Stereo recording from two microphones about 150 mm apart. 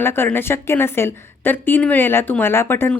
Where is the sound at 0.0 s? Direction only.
15° left (ahead or behind).